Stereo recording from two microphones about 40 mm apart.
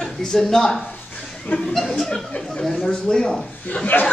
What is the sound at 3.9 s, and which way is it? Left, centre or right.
Speech, left.